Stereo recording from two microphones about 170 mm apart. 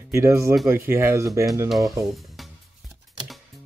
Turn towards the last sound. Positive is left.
turn(degrees=-25)  # may be behind; listen again after turning